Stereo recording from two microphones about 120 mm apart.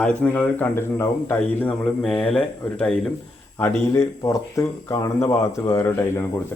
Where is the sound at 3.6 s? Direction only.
20° left (ahead or behind).